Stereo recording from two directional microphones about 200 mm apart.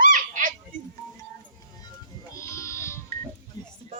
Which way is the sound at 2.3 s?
15° left (ahead or behind).